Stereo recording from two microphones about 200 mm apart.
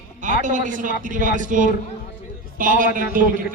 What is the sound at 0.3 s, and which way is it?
A man's voice, 40° right (ahead or behind).